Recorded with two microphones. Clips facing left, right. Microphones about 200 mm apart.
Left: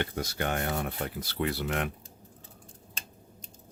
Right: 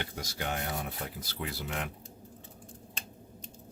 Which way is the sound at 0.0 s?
55° left (ahead or behind).